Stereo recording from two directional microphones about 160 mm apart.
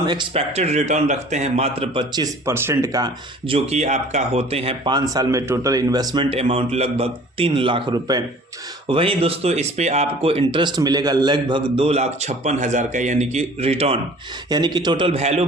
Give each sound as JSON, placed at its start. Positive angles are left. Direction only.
{"t": 0.0, "sound": "speech", "side_deg": -30}
{"t": 2.5, "sound": "speech", "side_deg": -15}
{"t": 3.4, "sound": "speech", "side_deg": -40}
{"t": 6.3, "sound": "speech", "side_deg": -35}
{"t": 8.9, "sound": "speech", "side_deg": -35}
{"t": 14.5, "sound": "speech", "side_deg": -25}